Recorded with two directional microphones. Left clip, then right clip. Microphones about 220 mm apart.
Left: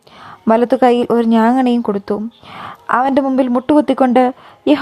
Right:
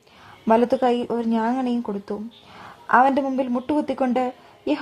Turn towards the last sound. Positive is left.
turn(degrees=30)  # may be behind; listen again after turning